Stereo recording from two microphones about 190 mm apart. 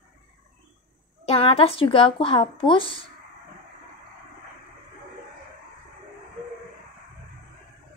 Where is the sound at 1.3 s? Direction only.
30° left (ahead or behind).